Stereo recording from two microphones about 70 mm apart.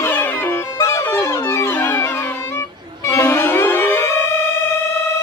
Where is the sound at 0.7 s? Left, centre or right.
Left.